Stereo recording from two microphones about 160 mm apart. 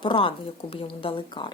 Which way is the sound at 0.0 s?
30° left (ahead or behind).